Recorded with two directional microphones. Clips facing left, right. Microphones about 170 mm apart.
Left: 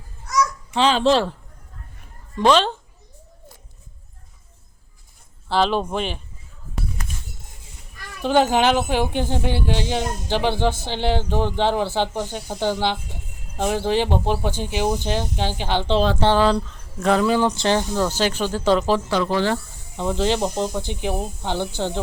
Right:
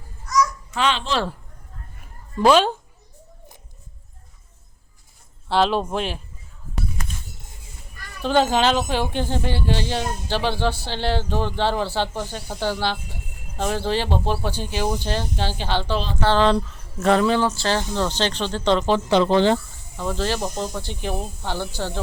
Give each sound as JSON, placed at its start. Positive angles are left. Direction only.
{"t": 0.7, "sound": "a child's voice", "side_deg": 30}
{"t": 2.4, "sound": "speech", "side_deg": -10}
{"t": 5.5, "sound": "speech", "side_deg": 0}
{"t": 8.2, "sound": "speech", "side_deg": 15}
{"t": 16.5, "sound": "speech", "side_deg": 0}
{"t": 19.0, "sound": "speech", "side_deg": -25}
{"t": 20.0, "sound": "speech", "side_deg": 20}